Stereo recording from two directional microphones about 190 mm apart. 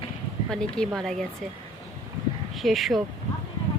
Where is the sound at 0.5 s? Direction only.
5° left (ahead or behind).